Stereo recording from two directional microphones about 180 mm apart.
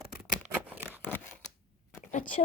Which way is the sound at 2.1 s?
45° left (ahead or behind).